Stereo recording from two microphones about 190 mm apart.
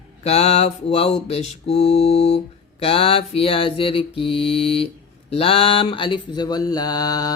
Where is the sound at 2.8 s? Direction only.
30° left (ahead or behind).